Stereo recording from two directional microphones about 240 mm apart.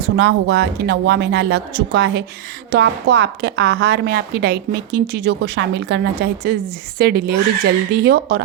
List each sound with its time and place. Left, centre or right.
0.2 s a woman's voice: right